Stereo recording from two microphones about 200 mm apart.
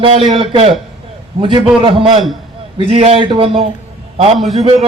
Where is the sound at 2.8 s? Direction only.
30° right (ahead or behind).